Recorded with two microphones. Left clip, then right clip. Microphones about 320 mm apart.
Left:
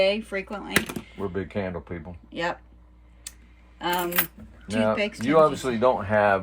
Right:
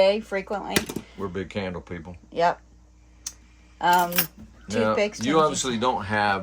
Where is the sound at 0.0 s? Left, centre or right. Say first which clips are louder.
Right 3 dB; right.